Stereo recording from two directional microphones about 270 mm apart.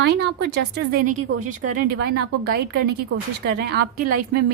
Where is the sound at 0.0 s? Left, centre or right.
Right.